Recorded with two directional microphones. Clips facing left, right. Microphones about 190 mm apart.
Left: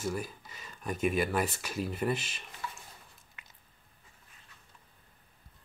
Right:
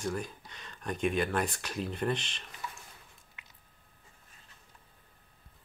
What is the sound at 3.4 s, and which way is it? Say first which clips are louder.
Squish: left 1 dB; 45° left (ahead or behind).